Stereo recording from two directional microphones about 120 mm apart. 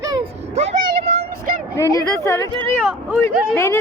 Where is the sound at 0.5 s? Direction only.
65° right (ahead or behind).